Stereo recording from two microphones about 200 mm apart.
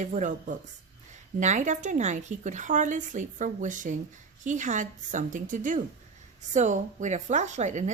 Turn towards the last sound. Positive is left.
turn(degrees=-35)  # may be behind; listen again after turning